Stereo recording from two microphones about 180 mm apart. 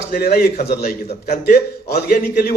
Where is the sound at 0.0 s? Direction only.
60° left (ahead or behind).